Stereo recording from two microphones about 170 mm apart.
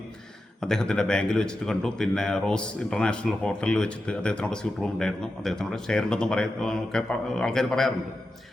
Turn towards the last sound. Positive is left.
turn(degrees=5)  # may be behind; listen again after turning